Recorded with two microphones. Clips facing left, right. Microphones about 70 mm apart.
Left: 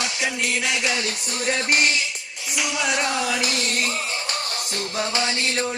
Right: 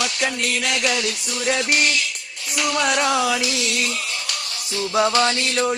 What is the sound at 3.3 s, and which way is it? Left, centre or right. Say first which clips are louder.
Music: right 1 dB; left.